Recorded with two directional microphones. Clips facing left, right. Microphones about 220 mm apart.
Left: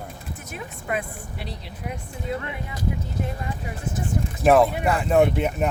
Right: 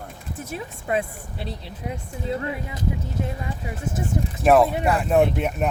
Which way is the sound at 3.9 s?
25° right (ahead or behind).